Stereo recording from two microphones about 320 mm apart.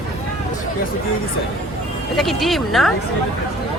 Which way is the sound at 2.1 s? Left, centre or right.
Centre.